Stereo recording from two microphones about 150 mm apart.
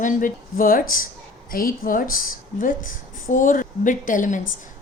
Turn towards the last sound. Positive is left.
turn(degrees=60)  # may be behind; listen again after turning